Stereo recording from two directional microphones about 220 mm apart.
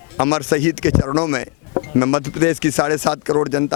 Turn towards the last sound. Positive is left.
turn(degrees=20)  # may be behind; listen again after turning